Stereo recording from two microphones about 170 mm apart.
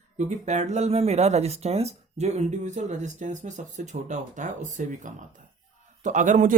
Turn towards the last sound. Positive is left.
turn(degrees=-50)  # may be behind; listen again after turning